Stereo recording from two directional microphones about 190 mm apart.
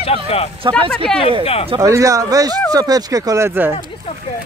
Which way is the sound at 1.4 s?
30° left (ahead or behind).